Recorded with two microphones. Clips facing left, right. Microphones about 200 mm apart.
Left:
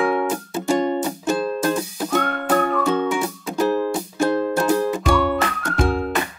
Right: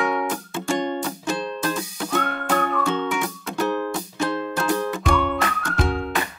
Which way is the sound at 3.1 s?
30° left (ahead or behind).